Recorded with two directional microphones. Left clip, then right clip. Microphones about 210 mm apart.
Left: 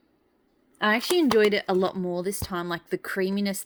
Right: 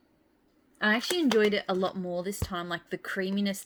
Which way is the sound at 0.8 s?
45° left (ahead or behind).